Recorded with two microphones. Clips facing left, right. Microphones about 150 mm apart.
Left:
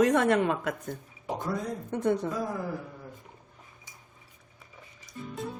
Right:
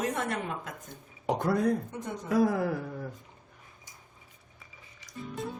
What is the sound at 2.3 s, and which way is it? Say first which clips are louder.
Speech: right 7 dB; 75° right (ahead or behind).